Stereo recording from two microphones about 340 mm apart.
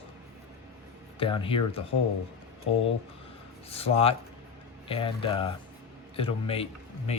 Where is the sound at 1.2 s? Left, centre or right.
Centre.